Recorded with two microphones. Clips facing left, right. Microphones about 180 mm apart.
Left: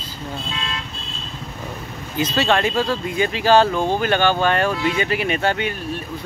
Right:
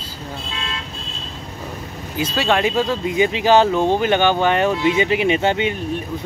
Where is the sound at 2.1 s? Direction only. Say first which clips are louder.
Even; 10° right (ahead or behind).